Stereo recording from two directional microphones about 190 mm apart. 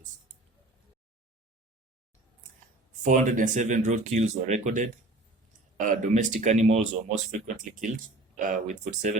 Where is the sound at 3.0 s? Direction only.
45° right (ahead or behind).